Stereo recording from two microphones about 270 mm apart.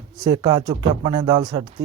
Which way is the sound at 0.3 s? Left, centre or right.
Centre.